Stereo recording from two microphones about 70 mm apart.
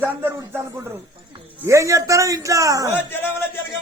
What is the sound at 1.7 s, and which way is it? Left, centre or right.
A man's voice, right.